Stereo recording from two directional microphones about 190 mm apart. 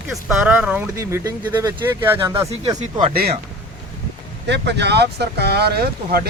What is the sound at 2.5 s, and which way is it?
Speech, 30° right (ahead or behind).